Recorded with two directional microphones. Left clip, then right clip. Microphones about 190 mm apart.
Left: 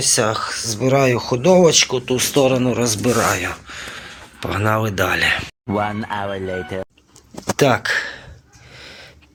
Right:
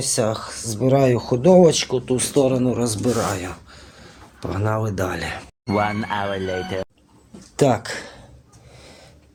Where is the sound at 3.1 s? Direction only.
15° left (ahead or behind).